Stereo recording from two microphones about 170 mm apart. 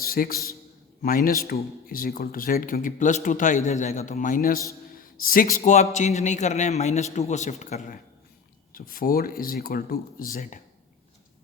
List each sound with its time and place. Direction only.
0.0 s a sound: 60° left (ahead or behind)
1.0 s a man's voice: 55° left (ahead or behind)
8.7 s a man's voice: 60° left (ahead or behind)